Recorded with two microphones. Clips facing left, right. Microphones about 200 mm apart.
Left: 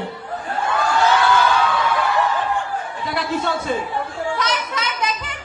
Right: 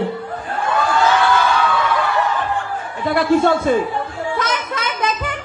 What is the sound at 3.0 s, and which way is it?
Speech, 50° right (ahead or behind).